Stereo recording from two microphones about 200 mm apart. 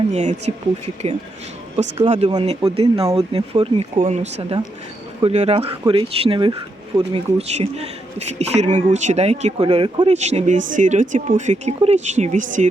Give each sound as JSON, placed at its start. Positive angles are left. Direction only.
{"t": 0.1, "sound": "speech", "side_deg": -35}
{"t": 1.7, "sound": "speech", "side_deg": -35}
{"t": 2.2, "sound": "speech", "side_deg": -25}